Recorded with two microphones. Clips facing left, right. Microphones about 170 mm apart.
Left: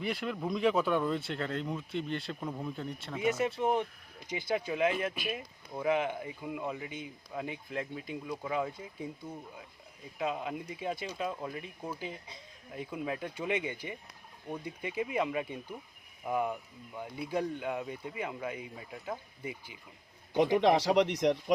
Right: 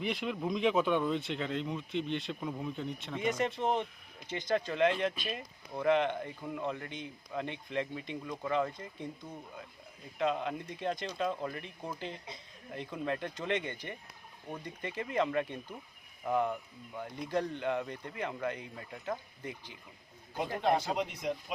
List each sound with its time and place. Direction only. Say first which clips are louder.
0.0 s speech: even; centre (ahead or behind)
20.3 s speech: left 6 dB; 85° left